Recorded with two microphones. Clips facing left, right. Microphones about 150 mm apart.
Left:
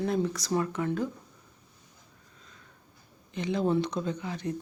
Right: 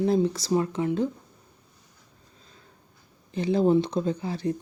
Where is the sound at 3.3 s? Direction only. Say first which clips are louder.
Right 6 dB; 35° right (ahead or behind).